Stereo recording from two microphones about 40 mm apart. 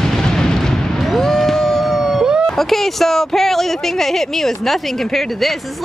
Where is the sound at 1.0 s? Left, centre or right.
Centre.